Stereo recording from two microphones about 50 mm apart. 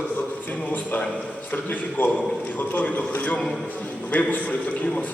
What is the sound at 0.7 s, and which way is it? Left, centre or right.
A man's voice, left.